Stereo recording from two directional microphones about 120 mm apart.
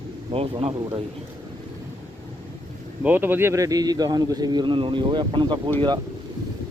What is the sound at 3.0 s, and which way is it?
Speech, 15° right (ahead or behind).